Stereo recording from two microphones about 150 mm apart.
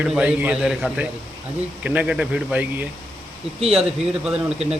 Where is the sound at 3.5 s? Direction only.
40° right (ahead or behind).